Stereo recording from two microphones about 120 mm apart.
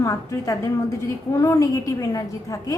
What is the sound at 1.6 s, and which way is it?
Speech, 30° left (ahead or behind).